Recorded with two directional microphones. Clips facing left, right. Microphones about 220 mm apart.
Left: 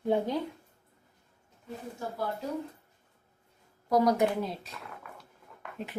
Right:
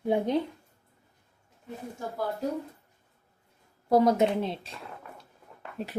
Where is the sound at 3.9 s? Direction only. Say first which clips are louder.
Right 3 dB; 25° right (ahead or behind).